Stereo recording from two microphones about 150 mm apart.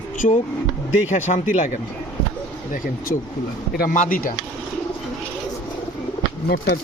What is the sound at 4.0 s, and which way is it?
Speech, 70° left (ahead or behind).